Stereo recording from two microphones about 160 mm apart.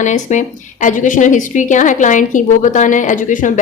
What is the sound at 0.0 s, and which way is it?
A woman's voice, 50° left (ahead or behind).